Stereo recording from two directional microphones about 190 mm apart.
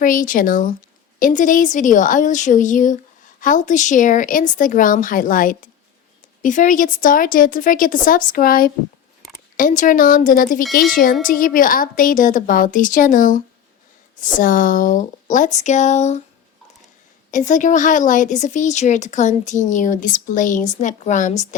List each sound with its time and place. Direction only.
0.0 s a woman's voice: 45° left (ahead or behind)
17.3 s speech: 40° left (ahead or behind)